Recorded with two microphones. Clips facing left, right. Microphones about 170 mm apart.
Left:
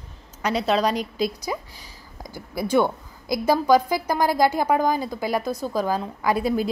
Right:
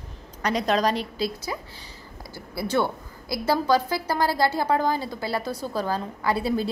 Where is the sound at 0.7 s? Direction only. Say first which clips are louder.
Left 2 dB; 10° left (ahead or behind).